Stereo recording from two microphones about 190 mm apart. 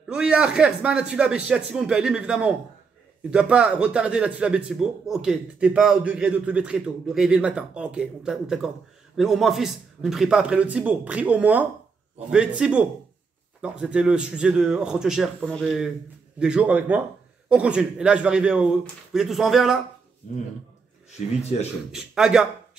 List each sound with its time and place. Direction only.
0.1 s a man's voice: 5° right (ahead or behind)
21.5 s a man's voice: 35° left (ahead or behind)
21.9 s speech: 5° right (ahead or behind)